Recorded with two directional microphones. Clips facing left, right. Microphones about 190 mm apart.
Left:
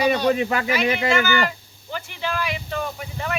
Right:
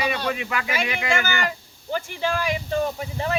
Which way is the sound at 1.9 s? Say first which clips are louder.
Right 3 dB; 45° right (ahead or behind).